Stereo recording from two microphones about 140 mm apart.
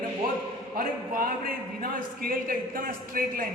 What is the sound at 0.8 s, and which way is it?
A man's voice, 90° right.